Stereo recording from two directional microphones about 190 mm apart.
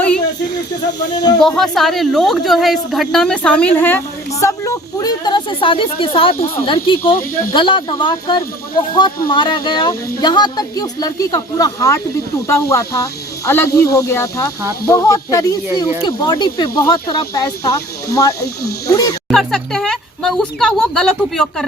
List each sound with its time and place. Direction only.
1.1 s speech: 20° left (ahead or behind)
1.4 s a woman's voice: centre (ahead or behind); by 18.3 s 20° left (ahead or behind)
18.3 s speech: 55° left (ahead or behind)
18.9 s speech: 20° left (ahead or behind)
19.3 s a woman's voice: centre (ahead or behind)